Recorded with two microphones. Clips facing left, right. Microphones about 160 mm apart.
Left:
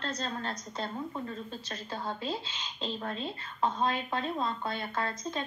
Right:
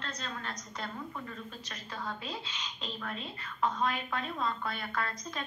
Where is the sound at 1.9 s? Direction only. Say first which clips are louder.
Left 4 dB; 30° left (ahead or behind).